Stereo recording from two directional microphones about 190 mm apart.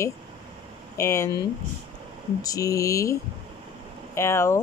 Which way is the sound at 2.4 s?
20° left (ahead or behind).